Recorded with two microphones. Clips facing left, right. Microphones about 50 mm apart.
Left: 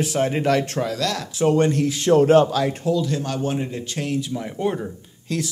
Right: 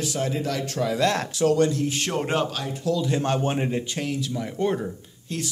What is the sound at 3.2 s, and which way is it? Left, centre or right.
Speech, right.